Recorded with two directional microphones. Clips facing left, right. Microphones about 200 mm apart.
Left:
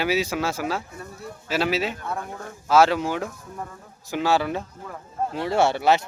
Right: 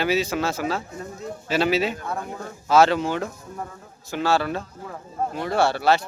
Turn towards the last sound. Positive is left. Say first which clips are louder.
# even
turn(degrees=20)  # may be behind; listen again after turning